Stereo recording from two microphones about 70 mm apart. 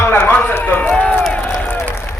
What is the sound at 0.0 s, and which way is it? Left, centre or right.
Run, left.